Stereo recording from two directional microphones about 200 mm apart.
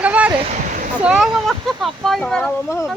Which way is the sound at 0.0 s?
5° right (ahead or behind).